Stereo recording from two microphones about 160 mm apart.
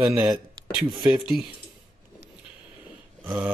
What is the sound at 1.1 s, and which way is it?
Speech, 5° right (ahead or behind).